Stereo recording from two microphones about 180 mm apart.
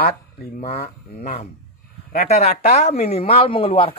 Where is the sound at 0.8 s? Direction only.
35° left (ahead or behind).